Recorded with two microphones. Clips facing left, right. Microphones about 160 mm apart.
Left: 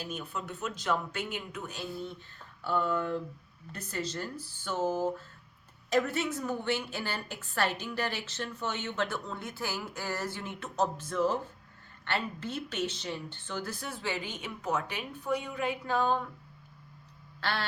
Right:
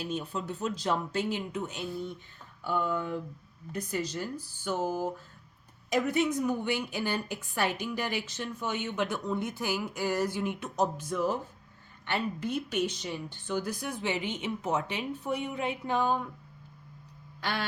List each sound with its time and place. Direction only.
0.0 s a woman's voice: 30° right (ahead or behind)
17.4 s quack: 15° right (ahead or behind)